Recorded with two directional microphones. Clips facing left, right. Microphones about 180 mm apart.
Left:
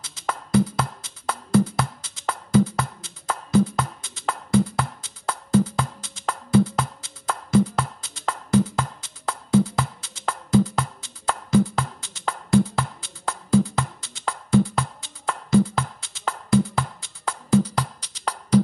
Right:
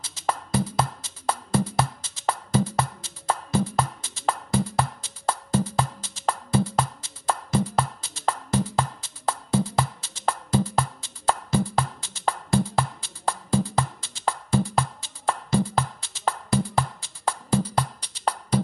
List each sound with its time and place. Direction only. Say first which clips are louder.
0.0 s music: right 2 dB; 25° right (ahead or behind)